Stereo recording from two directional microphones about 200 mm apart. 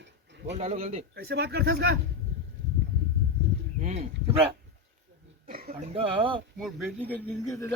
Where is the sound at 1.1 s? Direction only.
55° right (ahead or behind).